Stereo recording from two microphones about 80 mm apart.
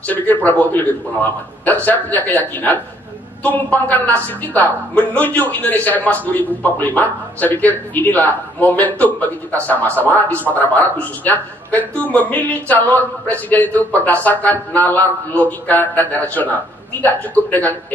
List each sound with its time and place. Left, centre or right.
0.0 s speech: centre